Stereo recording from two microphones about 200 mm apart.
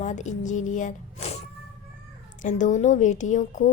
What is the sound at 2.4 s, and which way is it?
A woman's voice, 40° left (ahead or behind).